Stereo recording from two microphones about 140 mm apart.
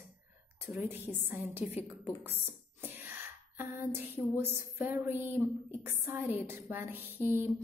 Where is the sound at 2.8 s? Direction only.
15° right (ahead or behind).